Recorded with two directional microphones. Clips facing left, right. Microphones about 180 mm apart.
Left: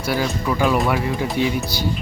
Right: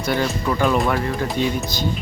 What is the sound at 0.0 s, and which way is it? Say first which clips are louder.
Speech: right 1 dB; 5° left (ahead or behind).